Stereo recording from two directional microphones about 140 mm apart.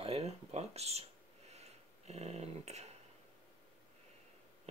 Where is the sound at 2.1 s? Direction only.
50° right (ahead or behind).